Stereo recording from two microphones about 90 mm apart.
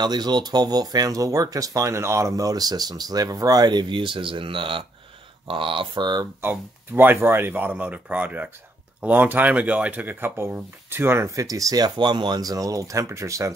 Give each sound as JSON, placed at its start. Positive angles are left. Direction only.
{"t": 0.0, "sound": "speech", "side_deg": -50}
{"t": 6.9, "sound": "speech", "side_deg": -25}
{"t": 12.0, "sound": "speech", "side_deg": -60}